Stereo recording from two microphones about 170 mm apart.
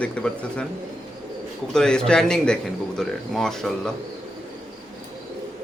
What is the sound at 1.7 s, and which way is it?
A man's voice, 5° left (ahead or behind).